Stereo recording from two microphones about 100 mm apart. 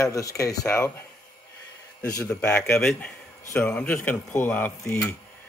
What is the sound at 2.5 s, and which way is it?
Speech, 20° left (ahead or behind).